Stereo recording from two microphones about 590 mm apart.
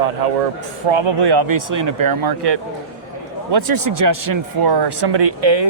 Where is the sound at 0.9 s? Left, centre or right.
Right.